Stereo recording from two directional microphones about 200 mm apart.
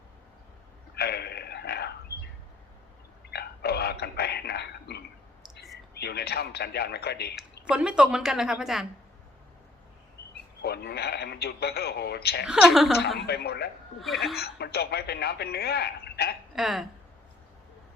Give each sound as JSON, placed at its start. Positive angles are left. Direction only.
{"t": 0.9, "sound": "burping", "side_deg": 55}
{"t": 3.3, "sound": "a sound", "side_deg": 55}
{"t": 5.9, "sound": "speech", "side_deg": 55}
{"t": 7.7, "sound": "a woman's voice", "side_deg": -5}
{"t": 10.6, "sound": "speech", "side_deg": 55}
{"t": 12.7, "sound": "a woman's voice", "side_deg": 0}
{"t": 13.1, "sound": "speech", "side_deg": 55}
{"t": 16.6, "sound": "a woman's voice", "side_deg": 0}